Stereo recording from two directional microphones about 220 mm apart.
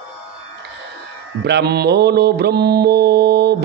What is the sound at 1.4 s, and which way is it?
A man's voice, 50° right (ahead or behind).